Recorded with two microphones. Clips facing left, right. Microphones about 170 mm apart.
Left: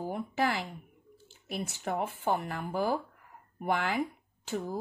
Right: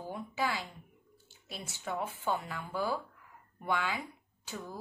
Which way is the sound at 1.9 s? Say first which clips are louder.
Left 3 dB; 55° left (ahead or behind).